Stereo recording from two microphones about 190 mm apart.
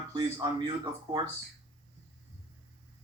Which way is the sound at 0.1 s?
25° right (ahead or behind).